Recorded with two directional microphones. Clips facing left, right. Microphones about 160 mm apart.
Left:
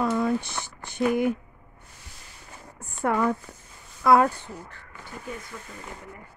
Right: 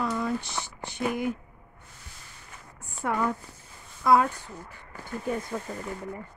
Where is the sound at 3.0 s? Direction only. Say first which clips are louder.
Left 4 dB; 55° left (ahead or behind).